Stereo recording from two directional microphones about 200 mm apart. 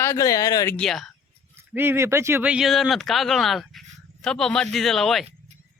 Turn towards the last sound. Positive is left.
turn(degrees=0)  # may be behind; listen again after turning